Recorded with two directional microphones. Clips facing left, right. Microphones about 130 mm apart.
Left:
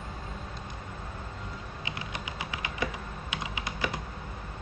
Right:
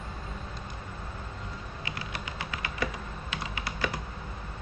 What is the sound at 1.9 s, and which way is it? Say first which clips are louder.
Typing: even; 20° left (ahead or behind).